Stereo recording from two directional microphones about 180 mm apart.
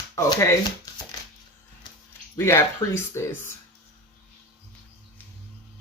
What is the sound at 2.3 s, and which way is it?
Speech, 15° left (ahead or behind).